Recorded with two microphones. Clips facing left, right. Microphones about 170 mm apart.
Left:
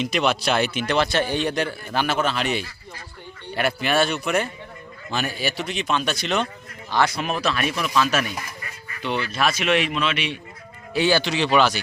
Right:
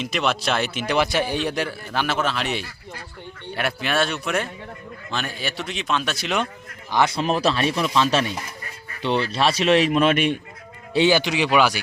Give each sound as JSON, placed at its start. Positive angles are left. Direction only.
{"t": 0.0, "sound": "a man's voice", "side_deg": 0}
{"t": 6.9, "sound": "speech", "side_deg": -25}
{"t": 10.9, "sound": "speech", "side_deg": -20}